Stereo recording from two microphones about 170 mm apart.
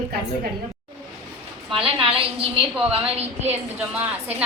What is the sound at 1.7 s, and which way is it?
A woman's voice, 30° right (ahead or behind).